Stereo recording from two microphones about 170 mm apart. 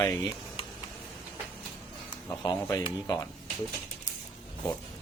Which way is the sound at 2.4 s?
20° left (ahead or behind).